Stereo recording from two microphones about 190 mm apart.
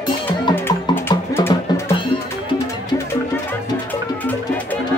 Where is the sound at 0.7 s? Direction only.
10° left (ahead or behind).